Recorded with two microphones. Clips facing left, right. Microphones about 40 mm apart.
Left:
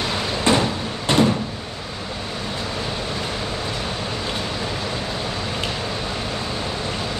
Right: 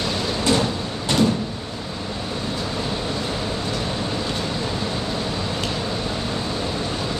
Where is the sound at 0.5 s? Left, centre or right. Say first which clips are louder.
Left 3 dB; left.